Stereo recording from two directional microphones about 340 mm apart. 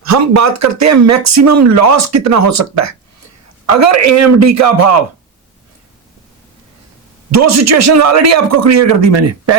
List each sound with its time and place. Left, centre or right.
0.0 s speech: right
7.3 s speech: right